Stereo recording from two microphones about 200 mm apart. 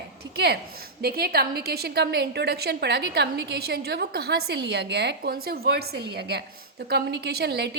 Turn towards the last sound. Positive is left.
turn(degrees=-55)  # may be behind; listen again after turning